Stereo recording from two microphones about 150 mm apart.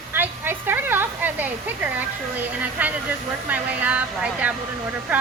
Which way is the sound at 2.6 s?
10° right (ahead or behind).